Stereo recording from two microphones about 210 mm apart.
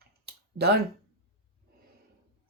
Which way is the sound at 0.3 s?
50° right (ahead or behind).